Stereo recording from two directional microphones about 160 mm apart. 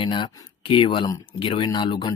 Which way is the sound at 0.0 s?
30° left (ahead or behind).